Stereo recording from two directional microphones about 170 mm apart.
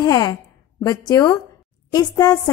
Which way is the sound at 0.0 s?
25° left (ahead or behind).